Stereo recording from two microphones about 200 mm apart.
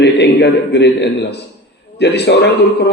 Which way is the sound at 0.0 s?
55° left (ahead or behind).